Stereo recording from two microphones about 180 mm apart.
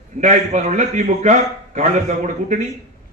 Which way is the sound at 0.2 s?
40° right (ahead or behind).